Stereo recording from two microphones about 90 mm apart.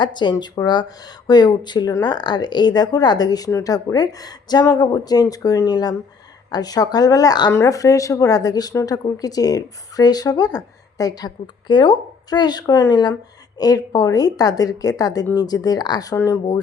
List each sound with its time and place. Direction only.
0.0 s speech: 60° left (ahead or behind)